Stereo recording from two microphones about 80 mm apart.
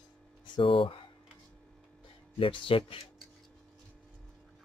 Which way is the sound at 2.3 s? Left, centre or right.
Left.